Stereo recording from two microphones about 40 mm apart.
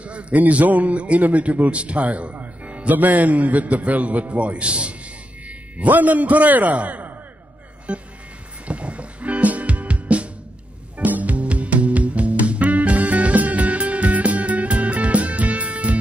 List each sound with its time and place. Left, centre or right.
0.0 s a man's voice: right
5.9 s a man's voice: right
8.6 s music: right